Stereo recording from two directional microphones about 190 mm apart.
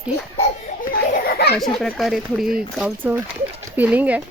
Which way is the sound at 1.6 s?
Centre (ahead or behind).